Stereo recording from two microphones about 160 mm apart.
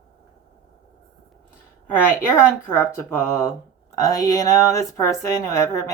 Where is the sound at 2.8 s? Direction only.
15° left (ahead or behind).